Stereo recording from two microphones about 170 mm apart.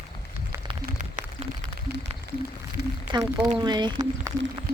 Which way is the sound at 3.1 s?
30° right (ahead or behind).